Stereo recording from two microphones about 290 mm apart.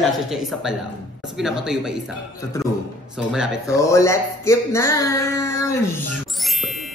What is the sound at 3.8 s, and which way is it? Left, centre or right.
Speech, centre.